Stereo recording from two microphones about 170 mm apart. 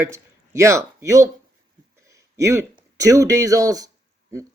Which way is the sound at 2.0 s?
20° right (ahead or behind).